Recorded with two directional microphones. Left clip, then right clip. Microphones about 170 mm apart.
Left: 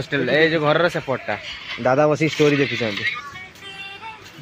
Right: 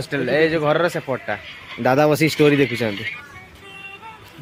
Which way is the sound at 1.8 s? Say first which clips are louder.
Right 1 dB; 30° right (ahead or behind).